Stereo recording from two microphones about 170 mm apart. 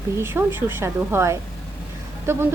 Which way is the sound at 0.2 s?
15° right (ahead or behind).